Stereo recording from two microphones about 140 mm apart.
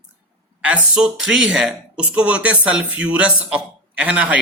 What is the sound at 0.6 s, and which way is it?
Speech, 5° right (ahead or behind).